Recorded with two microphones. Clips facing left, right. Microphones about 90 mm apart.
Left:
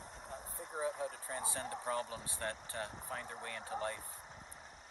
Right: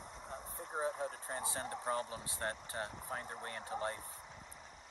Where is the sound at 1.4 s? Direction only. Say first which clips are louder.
Even; 25° right (ahead or behind).